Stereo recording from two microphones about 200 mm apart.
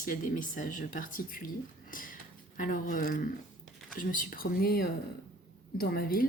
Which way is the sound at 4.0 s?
45° left (ahead or behind).